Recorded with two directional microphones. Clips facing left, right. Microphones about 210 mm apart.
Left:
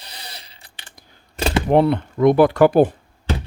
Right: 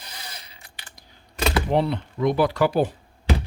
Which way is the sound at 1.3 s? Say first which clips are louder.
Left 3 dB; 30° left (ahead or behind).